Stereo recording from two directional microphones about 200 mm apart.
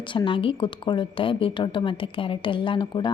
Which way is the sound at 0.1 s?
25° left (ahead or behind).